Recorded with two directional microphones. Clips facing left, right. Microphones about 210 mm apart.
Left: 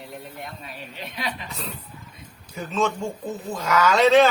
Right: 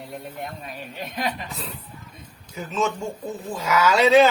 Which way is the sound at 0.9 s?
45° right (ahead or behind).